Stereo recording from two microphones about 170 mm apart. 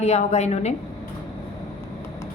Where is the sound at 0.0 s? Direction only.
40° left (ahead or behind).